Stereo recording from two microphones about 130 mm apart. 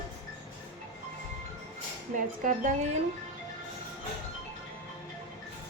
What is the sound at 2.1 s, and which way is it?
Speech, 90° right.